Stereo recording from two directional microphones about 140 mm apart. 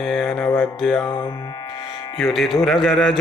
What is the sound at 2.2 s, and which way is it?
Music, centre (ahead or behind).